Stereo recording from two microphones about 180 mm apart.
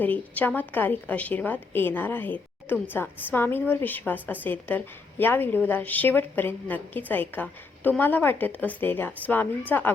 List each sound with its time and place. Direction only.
0.0 s a woman's voice: 10° left (ahead or behind)